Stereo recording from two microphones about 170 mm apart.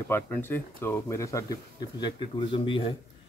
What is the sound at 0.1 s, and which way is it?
Speech, 10° left (ahead or behind).